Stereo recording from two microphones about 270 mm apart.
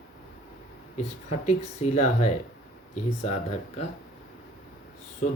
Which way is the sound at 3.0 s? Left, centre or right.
Left.